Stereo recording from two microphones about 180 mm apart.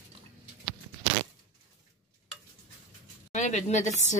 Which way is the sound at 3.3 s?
40° left (ahead or behind).